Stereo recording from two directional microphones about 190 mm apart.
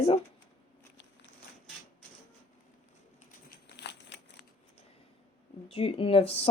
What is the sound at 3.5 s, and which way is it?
Crumpling, 60° left (ahead or behind).